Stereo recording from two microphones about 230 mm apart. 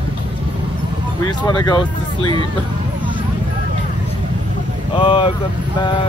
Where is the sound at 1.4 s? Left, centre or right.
Centre.